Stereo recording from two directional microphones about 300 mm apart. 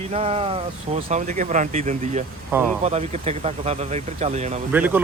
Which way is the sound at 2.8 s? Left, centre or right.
Right.